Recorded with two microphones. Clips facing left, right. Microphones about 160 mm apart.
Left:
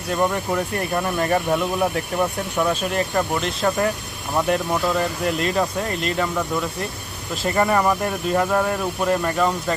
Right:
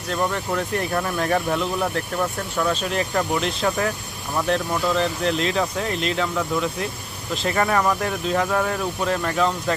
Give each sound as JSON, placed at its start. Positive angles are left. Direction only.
{"t": 0.1, "sound": "speech", "side_deg": 10}
{"t": 2.9, "sound": "speech", "side_deg": 0}